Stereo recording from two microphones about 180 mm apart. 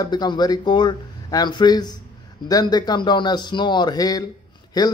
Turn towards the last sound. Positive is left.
turn(degrees=20)  # may be behind; listen again after turning